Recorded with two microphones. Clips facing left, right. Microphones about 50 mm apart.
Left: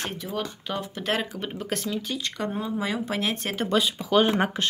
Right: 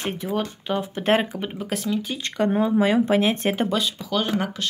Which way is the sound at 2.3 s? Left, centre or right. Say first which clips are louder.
Right 12 dB; right.